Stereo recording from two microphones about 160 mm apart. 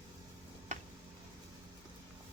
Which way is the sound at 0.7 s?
50° right (ahead or behind).